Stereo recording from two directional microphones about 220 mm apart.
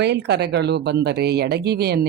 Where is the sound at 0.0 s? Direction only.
50° right (ahead or behind).